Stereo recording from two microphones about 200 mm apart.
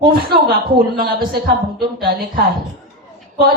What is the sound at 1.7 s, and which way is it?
Speech, 50° right (ahead or behind).